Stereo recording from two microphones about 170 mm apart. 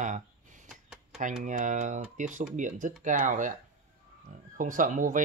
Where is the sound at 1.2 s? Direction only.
50° right (ahead or behind).